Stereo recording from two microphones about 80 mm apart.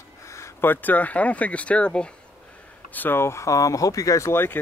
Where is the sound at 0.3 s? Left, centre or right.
Left.